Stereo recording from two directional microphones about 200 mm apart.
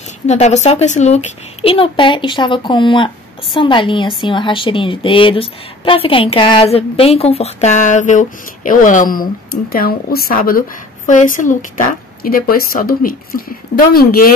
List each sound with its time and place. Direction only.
0.3 s a woman's voice: 35° left (ahead or behind)